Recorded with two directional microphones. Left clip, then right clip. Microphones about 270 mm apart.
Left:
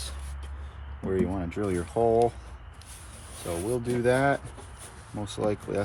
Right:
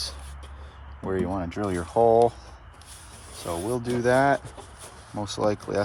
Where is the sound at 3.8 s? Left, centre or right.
Right.